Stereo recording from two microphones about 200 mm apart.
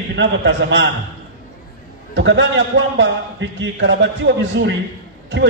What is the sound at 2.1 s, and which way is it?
A man's voice, 65° right (ahead or behind).